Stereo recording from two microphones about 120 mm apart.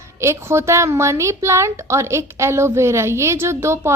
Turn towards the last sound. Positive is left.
turn(degrees=-20)  # may be behind; listen again after turning